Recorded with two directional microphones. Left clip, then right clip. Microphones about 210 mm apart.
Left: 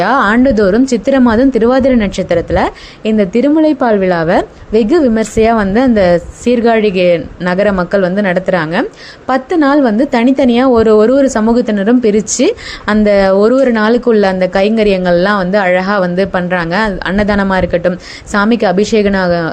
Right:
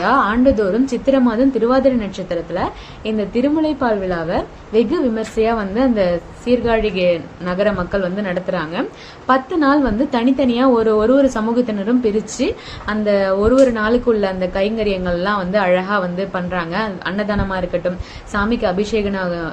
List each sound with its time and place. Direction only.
0.0 s a woman's voice: 40° left (ahead or behind)